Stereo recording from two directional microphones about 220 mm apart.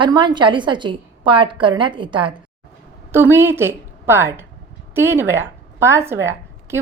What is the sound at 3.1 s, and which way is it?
A woman's voice, 10° right (ahead or behind).